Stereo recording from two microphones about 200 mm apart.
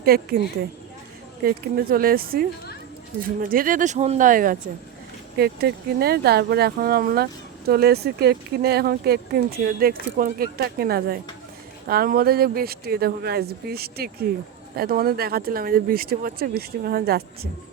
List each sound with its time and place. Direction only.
0.0 s speech: 50° right (ahead or behind)
1.5 s speech: 50° right (ahead or behind)